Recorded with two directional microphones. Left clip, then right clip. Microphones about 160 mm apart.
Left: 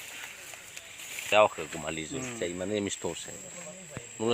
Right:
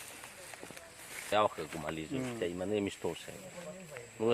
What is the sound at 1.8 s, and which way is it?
Speech, 65° left (ahead or behind).